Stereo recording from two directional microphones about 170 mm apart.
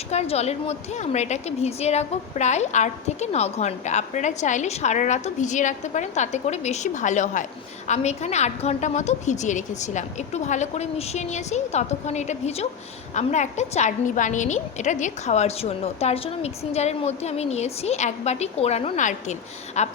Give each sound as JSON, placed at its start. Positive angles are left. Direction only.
{"t": 0.1, "sound": "a woman's voice", "side_deg": 40}